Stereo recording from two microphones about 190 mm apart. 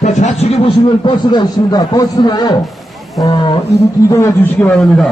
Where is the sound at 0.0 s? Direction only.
40° left (ahead or behind).